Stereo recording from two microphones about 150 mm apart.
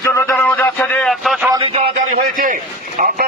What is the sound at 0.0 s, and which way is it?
A man's voice, 15° left (ahead or behind).